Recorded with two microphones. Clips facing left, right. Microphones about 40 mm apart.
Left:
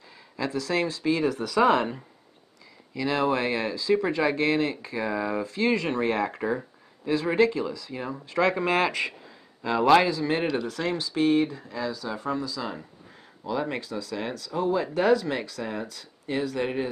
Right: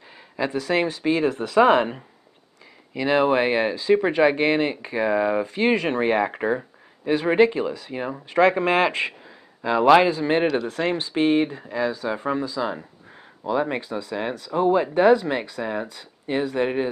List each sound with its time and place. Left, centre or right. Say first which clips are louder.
0.4 s speech: right 4 dB; right
9.6 s speech: right 4 dB; right
10.0 s speech: right 5 dB; right